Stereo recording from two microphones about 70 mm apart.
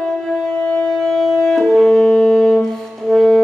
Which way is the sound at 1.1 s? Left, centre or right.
Centre.